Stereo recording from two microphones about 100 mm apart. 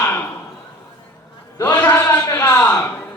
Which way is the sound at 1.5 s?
20° left (ahead or behind).